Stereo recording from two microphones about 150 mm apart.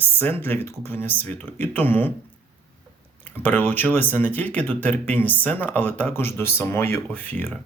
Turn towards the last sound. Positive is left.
turn(degrees=10)  # may be behind; listen again after turning